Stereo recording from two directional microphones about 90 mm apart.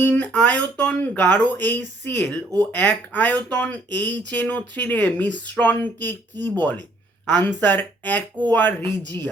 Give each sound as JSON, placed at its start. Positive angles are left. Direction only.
{"t": 0.0, "sound": "speech", "side_deg": 15}